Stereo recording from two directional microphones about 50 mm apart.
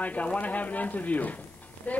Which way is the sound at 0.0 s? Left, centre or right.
Left.